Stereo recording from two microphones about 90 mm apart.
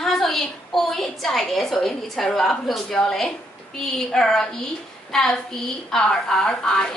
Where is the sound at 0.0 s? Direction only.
5° left (ahead or behind).